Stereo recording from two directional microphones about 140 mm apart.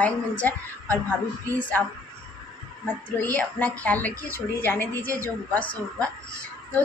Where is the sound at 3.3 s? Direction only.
10° left (ahead or behind).